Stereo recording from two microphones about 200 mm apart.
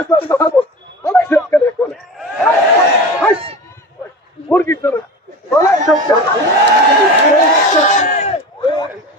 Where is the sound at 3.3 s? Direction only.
30° right (ahead or behind).